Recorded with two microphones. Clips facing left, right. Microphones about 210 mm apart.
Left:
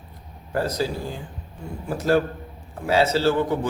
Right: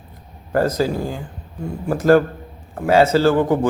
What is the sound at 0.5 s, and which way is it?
Speech, 50° right (ahead or behind).